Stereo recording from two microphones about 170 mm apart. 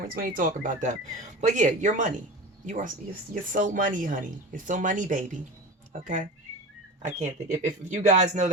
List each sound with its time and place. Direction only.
0.1 s speech: 55° right (ahead or behind)